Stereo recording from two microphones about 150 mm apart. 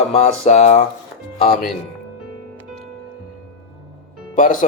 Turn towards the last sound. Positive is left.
turn(degrees=60)  # may be behind; listen again after turning